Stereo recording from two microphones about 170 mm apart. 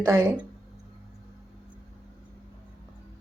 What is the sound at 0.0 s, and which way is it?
Speech, 15° right (ahead or behind).